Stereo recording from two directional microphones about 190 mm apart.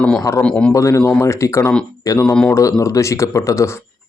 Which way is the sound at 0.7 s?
15° left (ahead or behind).